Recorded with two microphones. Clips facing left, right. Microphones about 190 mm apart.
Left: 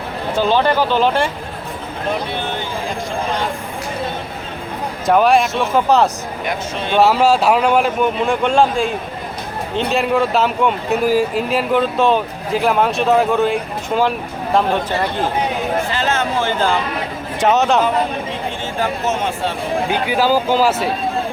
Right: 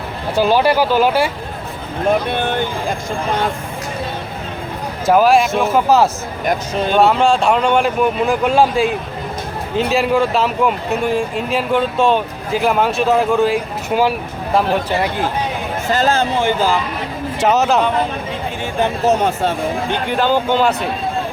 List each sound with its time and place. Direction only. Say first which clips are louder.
0.3 s speech: right 2 dB; 10° right (ahead or behind)
2.3 s speech: right 4 dB; 55° right (ahead or behind)
5.0 s speech: right 1 dB; centre (ahead or behind)
6.4 s speech: right 5 dB; 40° right (ahead or behind)
6.9 s speech: left 1 dB; 5° left (ahead or behind)
15.9 s speech: right 4 dB; 40° right (ahead or behind)
16.4 s speech: right 2 dB; 15° right (ahead or behind)
17.4 s speech: even; centre (ahead or behind)
19.0 s speech: right 5 dB; 40° right (ahead or behind)
19.9 s speech: left 1 dB; 5° left (ahead or behind)